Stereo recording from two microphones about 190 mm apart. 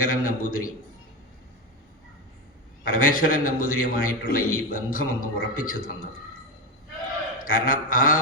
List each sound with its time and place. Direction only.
0.0 s a man's voice: 45° left (ahead or behind)
2.8 s a man's voice: 45° left (ahead or behind)
7.4 s a man's voice: 45° left (ahead or behind)